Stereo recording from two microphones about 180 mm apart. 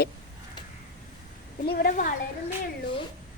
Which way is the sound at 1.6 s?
60° left (ahead or behind).